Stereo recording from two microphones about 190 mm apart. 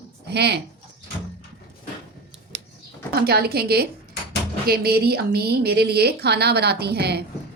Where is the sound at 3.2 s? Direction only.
55° right (ahead or behind).